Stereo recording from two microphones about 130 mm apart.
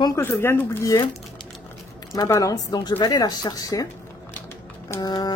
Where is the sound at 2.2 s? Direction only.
25° left (ahead or behind).